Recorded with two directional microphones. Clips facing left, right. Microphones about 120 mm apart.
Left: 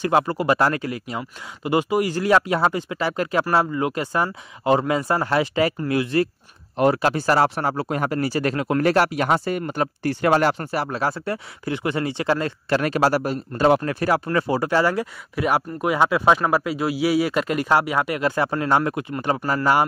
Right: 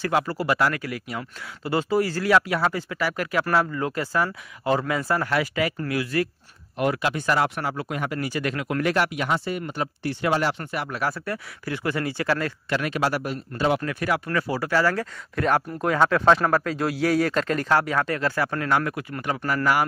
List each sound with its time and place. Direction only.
0.0 s speech: 20° left (ahead or behind)
12.6 s speech: 40° left (ahead or behind); by 15.0 s 20° left (ahead or behind)
15.3 s speech: 10° left (ahead or behind); by 19.9 s 25° left (ahead or behind)